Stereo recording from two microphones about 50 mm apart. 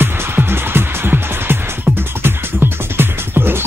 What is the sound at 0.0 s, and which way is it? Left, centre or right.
Music, right.